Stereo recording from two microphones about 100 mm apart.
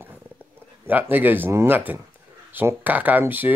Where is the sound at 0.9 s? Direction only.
20° right (ahead or behind).